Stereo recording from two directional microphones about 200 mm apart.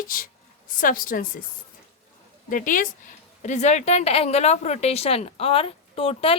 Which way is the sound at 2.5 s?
40° left (ahead or behind).